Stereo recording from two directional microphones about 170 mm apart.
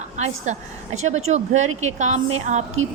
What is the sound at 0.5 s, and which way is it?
A woman's voice, 40° right (ahead or behind).